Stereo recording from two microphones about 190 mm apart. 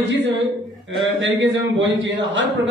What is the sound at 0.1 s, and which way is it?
Speech, 70° right (ahead or behind).